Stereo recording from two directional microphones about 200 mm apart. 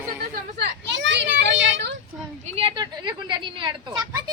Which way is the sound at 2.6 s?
25° right (ahead or behind).